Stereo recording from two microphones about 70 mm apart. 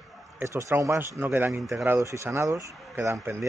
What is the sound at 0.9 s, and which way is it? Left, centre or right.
Speech, right.